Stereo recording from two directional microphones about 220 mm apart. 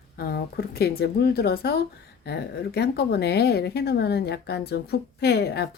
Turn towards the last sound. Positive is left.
turn(degrees=50)  # may be behind; listen again after turning